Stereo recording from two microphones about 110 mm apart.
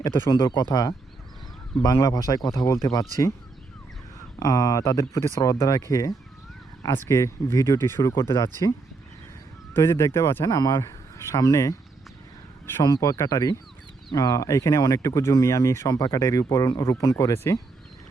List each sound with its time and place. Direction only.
0.3 s speech: 40° left (ahead or behind)
4.4 s speech: 30° left (ahead or behind)
9.7 s speech: 25° left (ahead or behind)
12.8 s speech: 35° left (ahead or behind)